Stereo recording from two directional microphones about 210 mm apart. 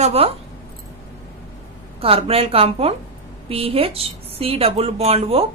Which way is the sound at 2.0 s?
25° right (ahead or behind).